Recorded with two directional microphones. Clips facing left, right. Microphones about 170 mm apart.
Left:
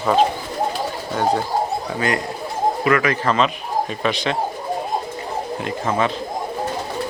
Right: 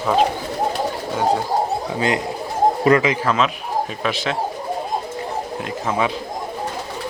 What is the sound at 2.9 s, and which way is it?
Speech, 35° right (ahead or behind).